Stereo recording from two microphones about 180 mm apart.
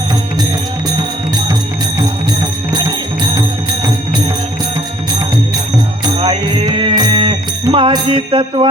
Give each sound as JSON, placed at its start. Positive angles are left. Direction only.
{"t": 6.1, "sound": "music", "side_deg": -30}